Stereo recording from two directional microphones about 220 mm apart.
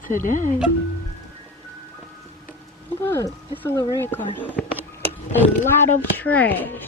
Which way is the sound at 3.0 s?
10° left (ahead or behind).